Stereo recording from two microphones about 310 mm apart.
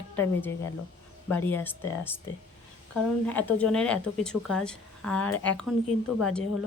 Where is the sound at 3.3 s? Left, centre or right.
Centre.